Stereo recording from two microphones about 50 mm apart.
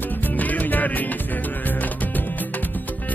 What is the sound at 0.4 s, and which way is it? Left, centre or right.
Music, left.